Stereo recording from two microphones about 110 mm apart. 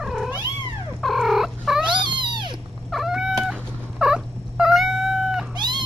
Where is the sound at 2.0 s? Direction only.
45° right (ahead or behind).